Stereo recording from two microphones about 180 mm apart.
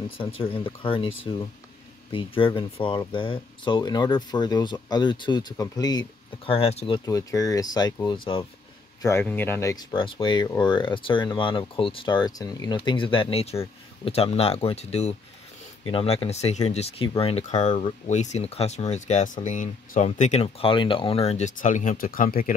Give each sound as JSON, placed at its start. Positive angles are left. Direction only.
{"t": 0.4, "sound": "speech", "side_deg": 30}
{"t": 7.1, "sound": "speech", "side_deg": 20}
{"t": 9.0, "sound": "speech", "side_deg": 10}